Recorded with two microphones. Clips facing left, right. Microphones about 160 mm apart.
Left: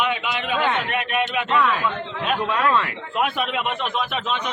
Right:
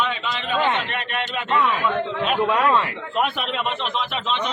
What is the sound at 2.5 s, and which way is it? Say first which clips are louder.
Speech: even; 25° right (ahead or behind).